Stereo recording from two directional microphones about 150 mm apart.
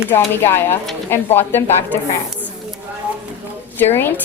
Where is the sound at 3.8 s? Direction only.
15° left (ahead or behind).